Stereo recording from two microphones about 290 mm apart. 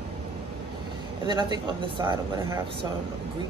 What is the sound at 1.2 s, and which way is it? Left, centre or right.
A woman's voice, centre.